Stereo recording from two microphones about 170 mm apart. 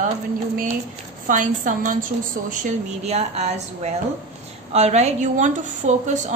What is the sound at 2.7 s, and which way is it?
A woman's voice, 40° right (ahead or behind).